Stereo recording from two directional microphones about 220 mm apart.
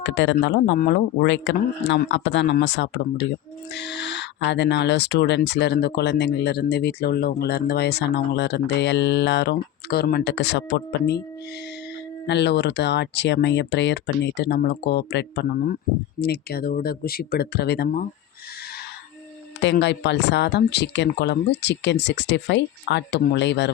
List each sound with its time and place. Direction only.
0.0 s speech: 55° left (ahead or behind)
12.2 s speech: 50° left (ahead or behind)
19.6 s speech: 55° left (ahead or behind)